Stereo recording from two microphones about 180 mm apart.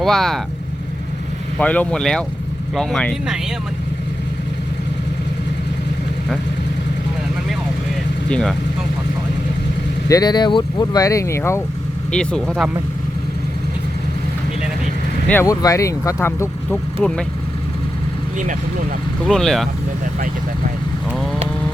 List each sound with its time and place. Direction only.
0.0 s speech: centre (ahead or behind)
1.5 s speech: 10° left (ahead or behind)
8.3 s speech: 5° left (ahead or behind)
10.1 s speech: 20° left (ahead or behind)
12.1 s speech: 5° left (ahead or behind)
15.3 s speech: 15° left (ahead or behind)
19.3 s speech: centre (ahead or behind)